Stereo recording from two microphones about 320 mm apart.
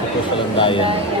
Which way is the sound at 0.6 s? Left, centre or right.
Centre.